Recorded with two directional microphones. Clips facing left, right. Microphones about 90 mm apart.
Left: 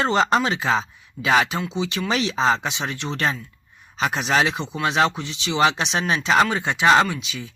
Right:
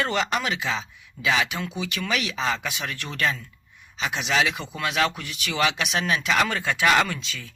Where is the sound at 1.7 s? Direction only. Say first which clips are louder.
Left 4 dB; 25° left (ahead or behind).